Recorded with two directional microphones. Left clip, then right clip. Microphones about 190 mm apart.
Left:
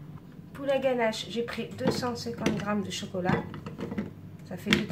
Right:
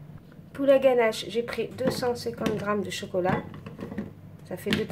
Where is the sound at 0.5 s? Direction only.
45° right (ahead or behind).